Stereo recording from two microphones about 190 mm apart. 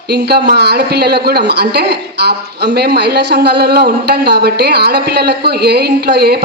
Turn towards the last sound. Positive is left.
turn(degrees=-60)  # may be behind; listen again after turning